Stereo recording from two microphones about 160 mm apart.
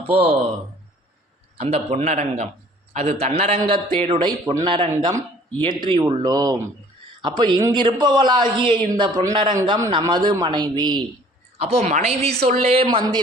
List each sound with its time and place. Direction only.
0.1 s a woman's voice: 40° right (ahead or behind)
1.5 s a woman's voice: 40° right (ahead or behind)
4.0 s a woman's voice: 30° right (ahead or behind)
11.5 s a woman's voice: 40° right (ahead or behind)